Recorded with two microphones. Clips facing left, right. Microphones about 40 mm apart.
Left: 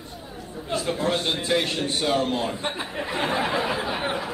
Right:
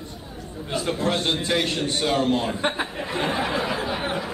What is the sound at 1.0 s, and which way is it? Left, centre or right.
A man's voice, centre.